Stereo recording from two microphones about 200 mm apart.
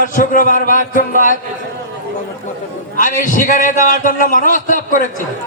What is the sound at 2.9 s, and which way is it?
A man's voice, 40° left (ahead or behind).